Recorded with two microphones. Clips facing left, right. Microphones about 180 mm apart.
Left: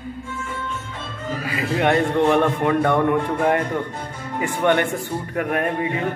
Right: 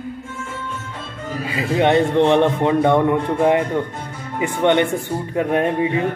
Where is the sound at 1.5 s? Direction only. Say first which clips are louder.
Right 3 dB; 25° right (ahead or behind).